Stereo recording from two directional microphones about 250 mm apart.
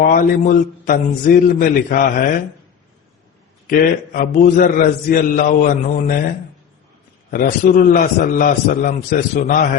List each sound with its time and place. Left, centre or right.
0.0 s a man's voice: left
3.7 s a man's voice: left
7.3 s a man's voice: left